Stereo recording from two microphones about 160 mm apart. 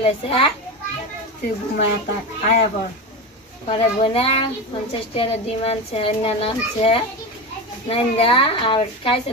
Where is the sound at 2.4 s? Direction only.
45° left (ahead or behind).